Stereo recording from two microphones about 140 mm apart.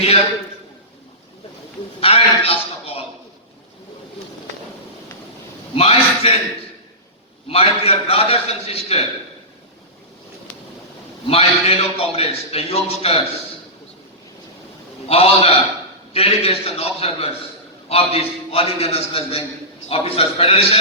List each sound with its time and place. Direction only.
2.0 s a man's voice: 45° left (ahead or behind)
5.7 s a man's voice: 45° left (ahead or behind)
7.4 s a man's voice: 45° left (ahead or behind)
11.3 s a man's voice: 45° left (ahead or behind)
15.0 s a man's voice: 45° left (ahead or behind)